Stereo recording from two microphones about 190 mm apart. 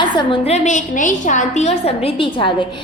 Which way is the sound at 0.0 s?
25° left (ahead or behind).